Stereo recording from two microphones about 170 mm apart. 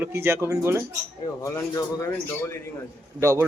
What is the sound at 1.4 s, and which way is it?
A man's voice, 20° left (ahead or behind).